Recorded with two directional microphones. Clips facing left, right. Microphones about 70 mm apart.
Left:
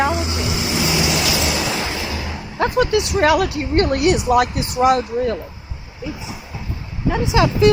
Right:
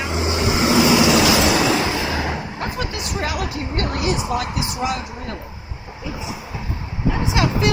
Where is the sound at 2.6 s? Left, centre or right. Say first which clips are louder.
Left 11 dB; left.